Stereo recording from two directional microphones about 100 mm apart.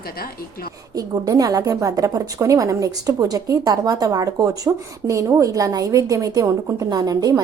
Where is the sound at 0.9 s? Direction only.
40° right (ahead or behind).